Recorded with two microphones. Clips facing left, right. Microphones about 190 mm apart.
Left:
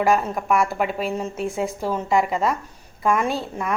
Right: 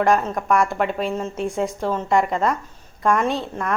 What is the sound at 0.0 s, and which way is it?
A woman's voice, 5° left (ahead or behind).